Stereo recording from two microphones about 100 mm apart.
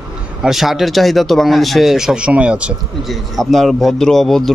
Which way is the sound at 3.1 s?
Centre (ahead or behind).